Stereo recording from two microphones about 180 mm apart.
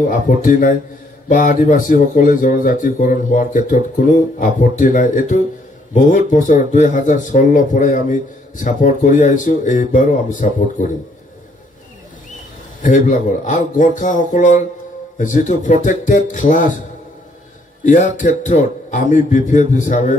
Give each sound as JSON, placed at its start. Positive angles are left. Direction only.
{"t": 0.5, "sound": "speech", "side_deg": 45}
{"t": 12.8, "sound": "speech", "side_deg": 45}
{"t": 17.8, "sound": "speech", "side_deg": 40}